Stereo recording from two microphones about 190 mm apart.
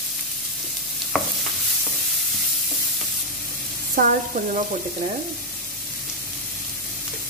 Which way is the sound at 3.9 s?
45° right (ahead or behind).